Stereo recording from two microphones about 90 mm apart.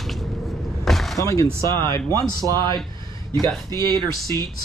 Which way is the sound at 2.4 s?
50° right (ahead or behind).